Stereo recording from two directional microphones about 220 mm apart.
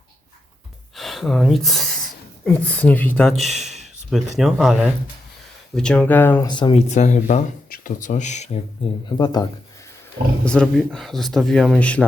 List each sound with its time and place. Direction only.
0.9 s a woman's voice: centre (ahead or behind)
6.5 s speech: 20° left (ahead or behind)
9.0 s speech: 20° left (ahead or behind)
10.4 s speech: 5° left (ahead or behind)